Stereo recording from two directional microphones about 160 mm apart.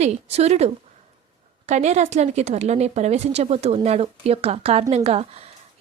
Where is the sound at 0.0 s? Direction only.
40° right (ahead or behind).